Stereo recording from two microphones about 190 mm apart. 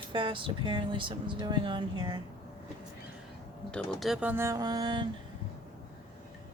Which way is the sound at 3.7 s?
Centre (ahead or behind).